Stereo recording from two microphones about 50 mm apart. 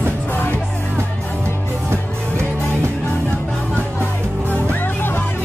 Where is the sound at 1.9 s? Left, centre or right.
Right.